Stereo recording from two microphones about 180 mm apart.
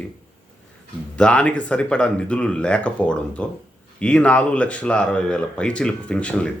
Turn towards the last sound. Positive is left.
turn(degrees=5)  # may be behind; listen again after turning